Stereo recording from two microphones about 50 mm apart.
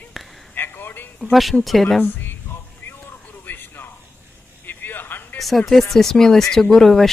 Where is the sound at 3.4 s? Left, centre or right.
Left.